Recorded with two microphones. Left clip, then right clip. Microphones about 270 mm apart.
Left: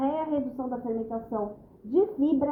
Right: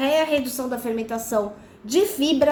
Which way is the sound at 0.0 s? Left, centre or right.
Right.